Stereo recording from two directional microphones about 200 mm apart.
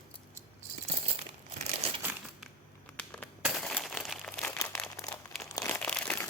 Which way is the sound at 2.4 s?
5° left (ahead or behind).